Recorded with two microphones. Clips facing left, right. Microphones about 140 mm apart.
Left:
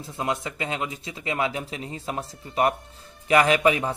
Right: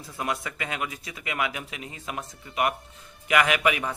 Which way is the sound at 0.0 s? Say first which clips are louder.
Left 3 dB; 25° left (ahead or behind).